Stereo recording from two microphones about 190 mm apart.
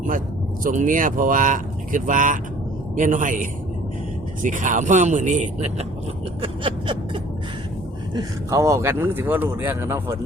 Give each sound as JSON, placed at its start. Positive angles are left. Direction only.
{"t": 0.6, "sound": "speech", "side_deg": -40}
{"t": 6.4, "sound": "a sound", "side_deg": -25}
{"t": 8.1, "sound": "speech", "side_deg": -15}